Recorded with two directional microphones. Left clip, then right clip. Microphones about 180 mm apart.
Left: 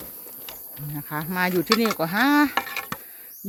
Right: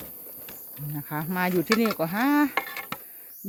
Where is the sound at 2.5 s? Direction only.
60° left (ahead or behind).